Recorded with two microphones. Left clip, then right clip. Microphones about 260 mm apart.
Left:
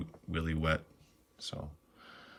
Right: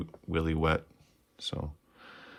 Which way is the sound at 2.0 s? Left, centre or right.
Right.